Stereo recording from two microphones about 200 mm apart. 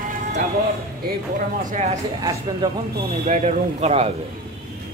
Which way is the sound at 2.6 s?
20° right (ahead or behind).